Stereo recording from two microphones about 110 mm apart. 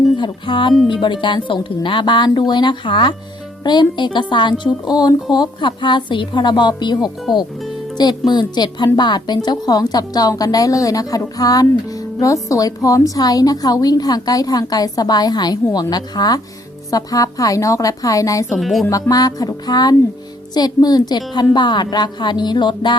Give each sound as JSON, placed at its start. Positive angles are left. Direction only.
{"t": 0.2, "sound": "a woman's voice", "side_deg": 50}
{"t": 18.5, "sound": "speech", "side_deg": 0}
{"t": 18.9, "sound": "a woman's voice", "side_deg": 30}